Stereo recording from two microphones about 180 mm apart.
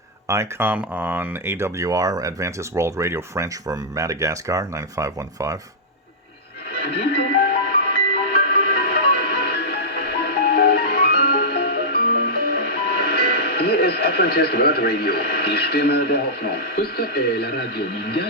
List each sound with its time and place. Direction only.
0.3 s speech: 15° right (ahead or behind)
7.3 s music: 60° left (ahead or behind)